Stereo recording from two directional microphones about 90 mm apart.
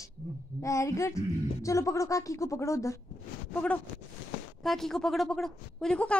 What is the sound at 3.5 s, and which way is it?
Speech, 15° left (ahead or behind).